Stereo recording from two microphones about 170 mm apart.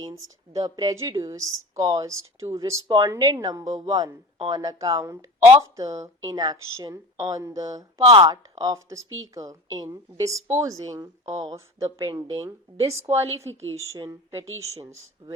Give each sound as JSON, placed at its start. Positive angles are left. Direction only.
{"t": 0.0, "sound": "speech", "side_deg": -20}